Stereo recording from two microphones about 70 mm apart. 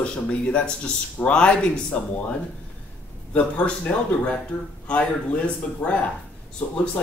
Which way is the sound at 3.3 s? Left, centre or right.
Centre.